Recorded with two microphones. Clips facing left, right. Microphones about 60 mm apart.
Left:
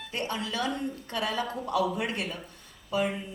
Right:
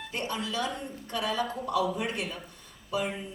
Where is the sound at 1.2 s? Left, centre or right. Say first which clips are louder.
Right 1 dB; left.